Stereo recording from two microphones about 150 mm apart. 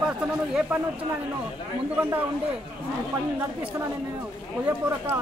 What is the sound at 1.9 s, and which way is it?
Speech, 15° right (ahead or behind).